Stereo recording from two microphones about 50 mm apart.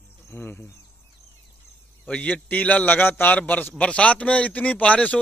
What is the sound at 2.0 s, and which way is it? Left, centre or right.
Speech, left.